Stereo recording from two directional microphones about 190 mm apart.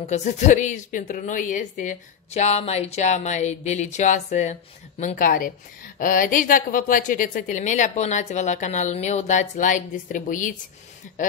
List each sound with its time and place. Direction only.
0.0 s a woman's voice: 35° left (ahead or behind)